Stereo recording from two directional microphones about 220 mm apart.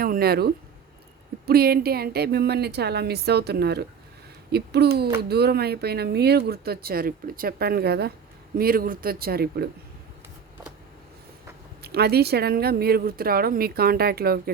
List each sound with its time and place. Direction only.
0.0 s speech: 45° right (ahead or behind)
11.8 s speech: 45° right (ahead or behind)